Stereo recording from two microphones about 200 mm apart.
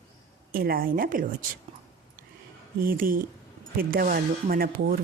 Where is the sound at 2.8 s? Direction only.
45° right (ahead or behind).